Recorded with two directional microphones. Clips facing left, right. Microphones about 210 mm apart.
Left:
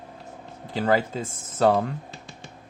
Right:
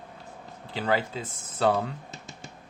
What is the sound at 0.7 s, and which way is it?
Speech, 45° left (ahead or behind).